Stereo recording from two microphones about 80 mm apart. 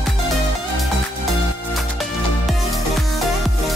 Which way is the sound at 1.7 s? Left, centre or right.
Centre.